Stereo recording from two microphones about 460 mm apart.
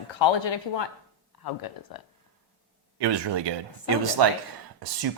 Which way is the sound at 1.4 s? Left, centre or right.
Left.